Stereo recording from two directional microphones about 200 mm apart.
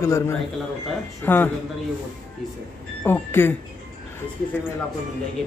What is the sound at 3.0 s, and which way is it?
Speech, 10° left (ahead or behind).